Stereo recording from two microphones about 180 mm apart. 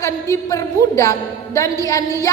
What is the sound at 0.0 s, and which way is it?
A woman's voice, 15° left (ahead or behind).